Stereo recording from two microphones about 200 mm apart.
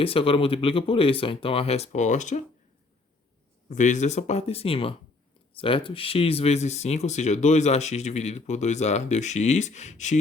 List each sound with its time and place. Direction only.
0.0 s speech: 25° left (ahead or behind)
3.7 s speech: 35° left (ahead or behind)